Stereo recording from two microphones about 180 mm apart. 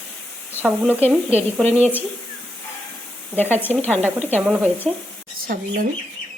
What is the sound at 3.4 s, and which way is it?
Speech, 10° left (ahead or behind).